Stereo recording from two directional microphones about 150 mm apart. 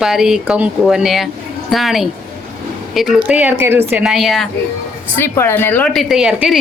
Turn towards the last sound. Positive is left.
turn(degrees=-5)  # may be behind; listen again after turning